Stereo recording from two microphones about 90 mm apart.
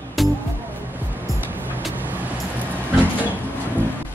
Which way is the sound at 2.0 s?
20° right (ahead or behind).